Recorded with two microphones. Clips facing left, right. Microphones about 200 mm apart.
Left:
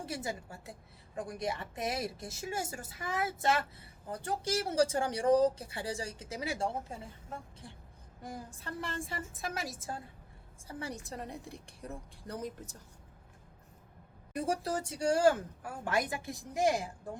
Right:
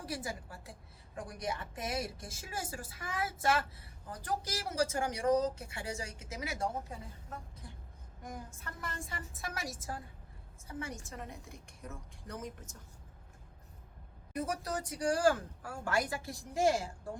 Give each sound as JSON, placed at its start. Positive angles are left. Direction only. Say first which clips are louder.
{"t": 0.0, "sound": "speech", "louder": "left 2 dB", "side_deg": 25}
{"t": 14.3, "sound": "speech", "louder": "left 3 dB", "side_deg": 30}